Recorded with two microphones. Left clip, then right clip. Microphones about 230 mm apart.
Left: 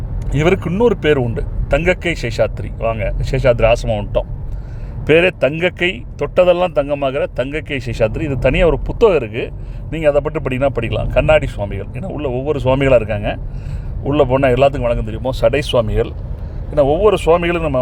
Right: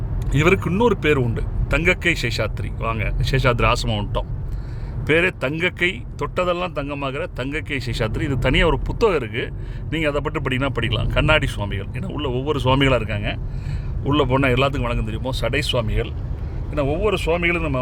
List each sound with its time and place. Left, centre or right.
0.3 s speech: centre
5.0 s speech: centre